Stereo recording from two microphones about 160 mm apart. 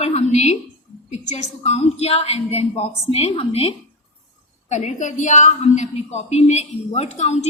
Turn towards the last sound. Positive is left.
turn(degrees=45)  # may be behind; listen again after turning